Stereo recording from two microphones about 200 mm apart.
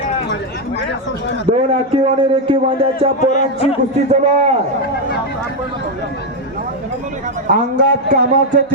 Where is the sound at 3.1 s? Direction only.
40° left (ahead or behind).